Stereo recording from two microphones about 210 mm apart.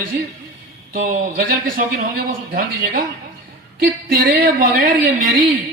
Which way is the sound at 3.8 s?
40° right (ahead or behind).